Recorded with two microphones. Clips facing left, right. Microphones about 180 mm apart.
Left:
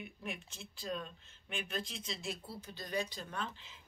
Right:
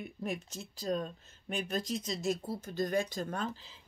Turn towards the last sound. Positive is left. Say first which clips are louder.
# right 6 dB
turn(degrees=-35)  # may be behind; listen again after turning